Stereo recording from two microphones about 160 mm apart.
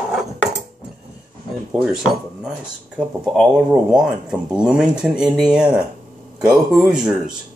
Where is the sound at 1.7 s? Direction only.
5° right (ahead or behind).